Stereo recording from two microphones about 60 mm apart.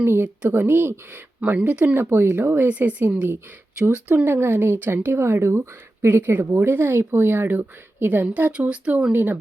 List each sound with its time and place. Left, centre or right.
0.0 s speech: right
1.4 s speech: right
8.3 s speech: right
9.1 s speech: right